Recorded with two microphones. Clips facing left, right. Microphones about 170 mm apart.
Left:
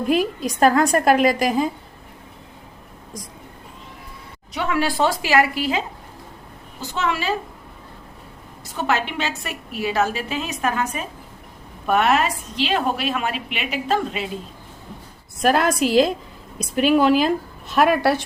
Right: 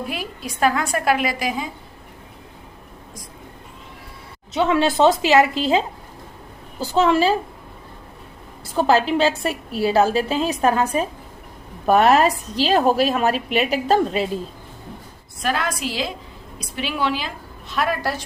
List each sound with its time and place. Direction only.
0.1 s a woman's voice: 40° left (ahead or behind)
4.5 s a woman's voice: 25° right (ahead or behind)
8.6 s a woman's voice: 30° right (ahead or behind)
15.4 s a woman's voice: 50° left (ahead or behind)